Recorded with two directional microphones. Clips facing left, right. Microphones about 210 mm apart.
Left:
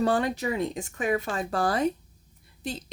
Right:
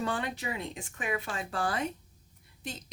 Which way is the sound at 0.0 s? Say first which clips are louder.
Left 8 dB; 40° left (ahead or behind).